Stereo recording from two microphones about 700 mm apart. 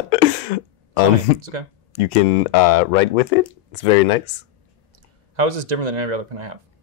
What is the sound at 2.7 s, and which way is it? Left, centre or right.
Speech, left.